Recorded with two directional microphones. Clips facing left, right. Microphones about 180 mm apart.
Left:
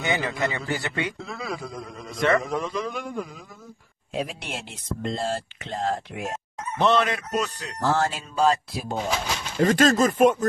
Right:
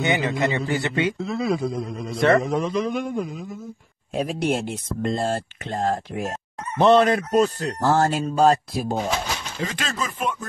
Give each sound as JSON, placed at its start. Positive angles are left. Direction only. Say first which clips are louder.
{"t": 0.0, "sound": "a man's voice", "louder": "right 4 dB", "side_deg": -20}
{"t": 2.4, "sound": "a man's voice", "louder": "right 5 dB", "side_deg": -20}
{"t": 4.1, "sound": "speech", "louder": "right 8 dB", "side_deg": -45}
{"t": 6.8, "sound": "fowl", "louder": "right 6 dB", "side_deg": -35}
{"t": 7.3, "sound": "speech", "louder": "right 8 dB", "side_deg": -40}
{"t": 9.6, "sound": "speech", "louder": "left 12 dB", "side_deg": 45}